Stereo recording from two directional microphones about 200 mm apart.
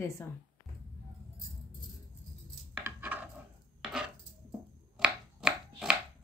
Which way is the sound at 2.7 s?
10° right (ahead or behind).